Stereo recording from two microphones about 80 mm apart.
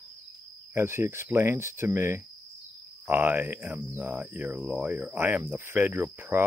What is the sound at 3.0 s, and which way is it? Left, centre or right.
Speech, right.